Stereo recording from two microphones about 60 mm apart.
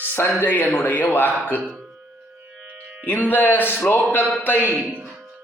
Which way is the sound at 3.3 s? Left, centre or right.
Left.